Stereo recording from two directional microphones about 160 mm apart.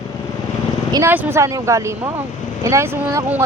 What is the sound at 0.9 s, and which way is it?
Speech, 15° right (ahead or behind).